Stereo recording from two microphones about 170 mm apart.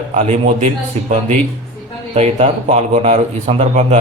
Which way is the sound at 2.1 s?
40° right (ahead or behind).